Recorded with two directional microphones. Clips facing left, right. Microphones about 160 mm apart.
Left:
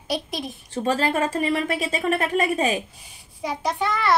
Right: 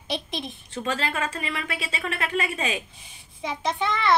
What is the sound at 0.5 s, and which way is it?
A woman's voice, 35° left (ahead or behind).